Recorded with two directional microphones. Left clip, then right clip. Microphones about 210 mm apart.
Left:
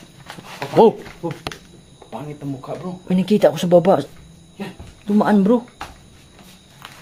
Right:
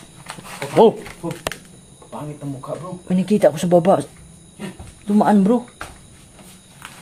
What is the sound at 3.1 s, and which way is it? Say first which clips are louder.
Speech: even; 15° left (ahead or behind).